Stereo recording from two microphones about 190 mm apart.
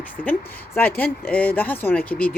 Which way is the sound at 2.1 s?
50° left (ahead or behind).